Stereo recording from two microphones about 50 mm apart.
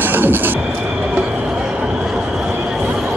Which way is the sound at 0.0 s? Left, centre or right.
Right.